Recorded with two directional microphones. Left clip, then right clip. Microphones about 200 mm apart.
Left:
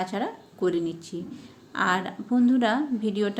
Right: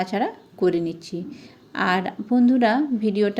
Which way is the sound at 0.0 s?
30° right (ahead or behind).